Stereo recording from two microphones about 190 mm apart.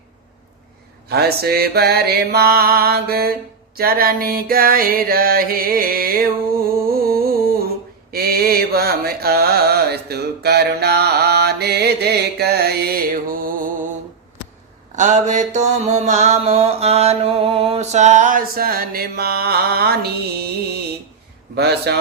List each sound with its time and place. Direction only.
1.0 s music: 55° right (ahead or behind)
3.8 s mantra: 50° right (ahead or behind)
6.8 s a sound: 50° right (ahead or behind)
8.1 s mantra: 55° right (ahead or behind)
14.9 s mantra: 40° right (ahead or behind); by 20.5 s 55° right (ahead or behind)
21.5 s a man's voice: 60° right (ahead or behind)